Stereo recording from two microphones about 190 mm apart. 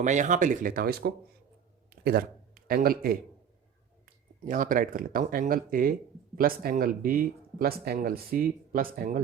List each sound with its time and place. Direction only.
0.0 s a man's voice: 40° right (ahead or behind)
4.4 s speech: 45° right (ahead or behind)